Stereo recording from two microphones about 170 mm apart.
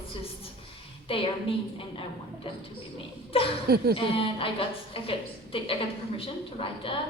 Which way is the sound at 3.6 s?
65° right (ahead or behind).